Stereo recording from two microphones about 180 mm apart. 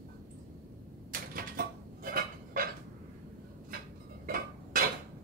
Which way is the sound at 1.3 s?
55° right (ahead or behind).